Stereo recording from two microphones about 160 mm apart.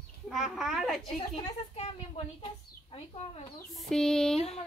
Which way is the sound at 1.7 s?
35° left (ahead or behind).